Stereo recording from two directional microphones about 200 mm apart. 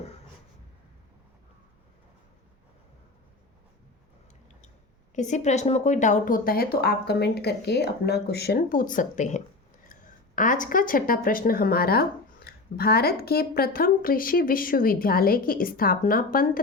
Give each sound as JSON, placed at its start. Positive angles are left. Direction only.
{"t": 5.1, "sound": "speech", "side_deg": 35}